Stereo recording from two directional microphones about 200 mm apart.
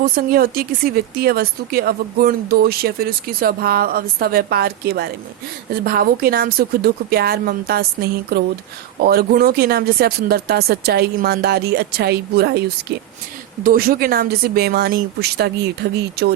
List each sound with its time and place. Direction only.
0.0 s speech: 50° right (ahead or behind)
13.7 s speech: 50° right (ahead or behind)